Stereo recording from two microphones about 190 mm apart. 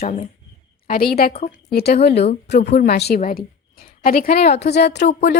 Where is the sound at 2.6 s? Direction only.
50° left (ahead or behind).